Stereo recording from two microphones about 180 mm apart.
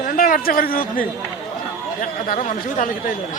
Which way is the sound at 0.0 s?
50° left (ahead or behind).